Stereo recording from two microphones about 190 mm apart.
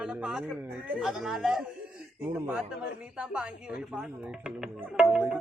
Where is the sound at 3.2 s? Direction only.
5° right (ahead or behind).